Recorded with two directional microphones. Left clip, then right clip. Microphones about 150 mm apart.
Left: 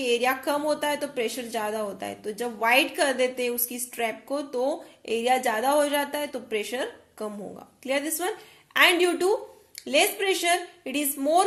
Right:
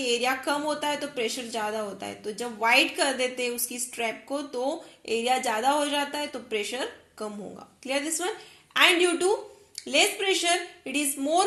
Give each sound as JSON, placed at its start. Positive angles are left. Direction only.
{"t": 0.0, "sound": "a woman's voice", "side_deg": 15}